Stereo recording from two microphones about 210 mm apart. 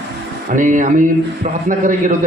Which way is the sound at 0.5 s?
40° right (ahead or behind).